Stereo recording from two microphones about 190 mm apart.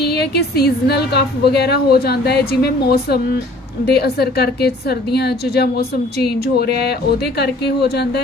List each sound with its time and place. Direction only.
0.1 s a woman's voice: 60° left (ahead or behind)